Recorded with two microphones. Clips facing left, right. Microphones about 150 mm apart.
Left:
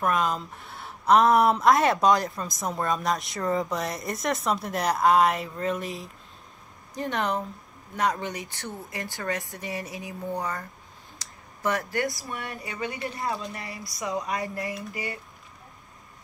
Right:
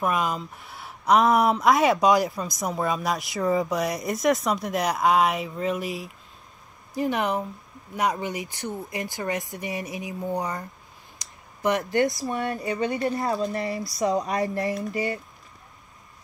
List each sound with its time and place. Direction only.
0.0 s speech: 5° right (ahead or behind)
7.0 s speech: 15° right (ahead or behind)
13.0 s speech: 40° right (ahead or behind); by 15.1 s 20° right (ahead or behind)